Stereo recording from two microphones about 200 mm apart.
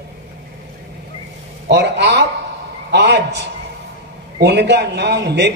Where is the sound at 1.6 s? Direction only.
60° right (ahead or behind).